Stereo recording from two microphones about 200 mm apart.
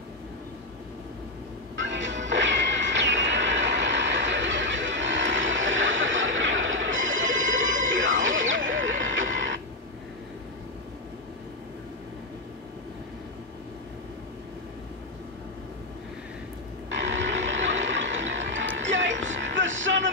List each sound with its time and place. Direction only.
1.8 s music: 65° right (ahead or behind)
8.4 s neigh: 75° right (ahead or behind)
9.3 s printer: 70° right (ahead or behind)
16.9 s music: 65° right (ahead or behind)